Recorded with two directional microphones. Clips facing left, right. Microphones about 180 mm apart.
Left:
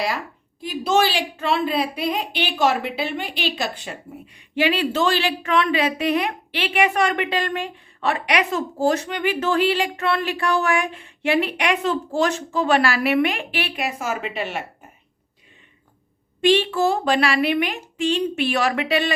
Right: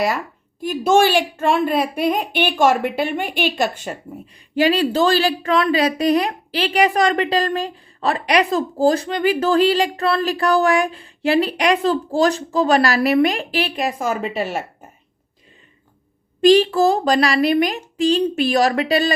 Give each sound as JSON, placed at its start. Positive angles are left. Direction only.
{"t": 0.6, "sound": "a woman's voice", "side_deg": -50}
{"t": 16.4, "sound": "a woman's voice", "side_deg": -40}